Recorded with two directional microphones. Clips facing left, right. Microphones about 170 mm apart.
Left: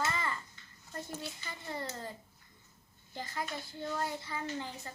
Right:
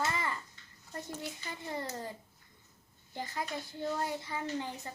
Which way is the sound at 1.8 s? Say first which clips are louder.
Right 1 dB; 15° right (ahead or behind).